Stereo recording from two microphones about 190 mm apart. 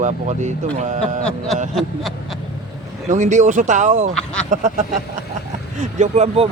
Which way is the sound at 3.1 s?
40° right (ahead or behind).